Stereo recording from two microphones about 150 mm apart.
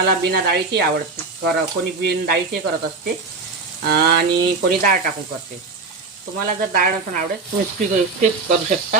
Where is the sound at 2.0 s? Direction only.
90° right.